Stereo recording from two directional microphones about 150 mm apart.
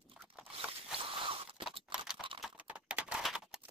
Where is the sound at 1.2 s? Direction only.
35° right (ahead or behind).